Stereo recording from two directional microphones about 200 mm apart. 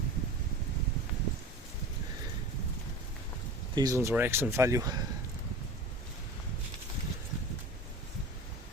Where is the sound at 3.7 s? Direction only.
15° right (ahead or behind).